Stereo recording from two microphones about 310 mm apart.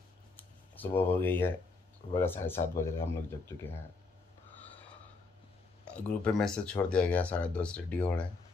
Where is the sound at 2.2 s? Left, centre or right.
Centre.